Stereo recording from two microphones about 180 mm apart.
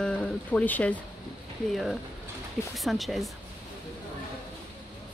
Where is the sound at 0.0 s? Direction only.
5° left (ahead or behind).